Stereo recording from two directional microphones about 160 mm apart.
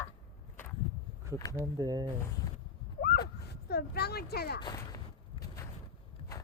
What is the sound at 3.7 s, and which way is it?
Speech, 90° left.